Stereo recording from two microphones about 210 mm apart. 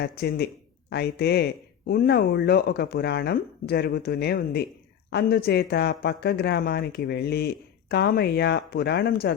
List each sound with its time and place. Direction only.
0.0 s speech: 50° left (ahead or behind)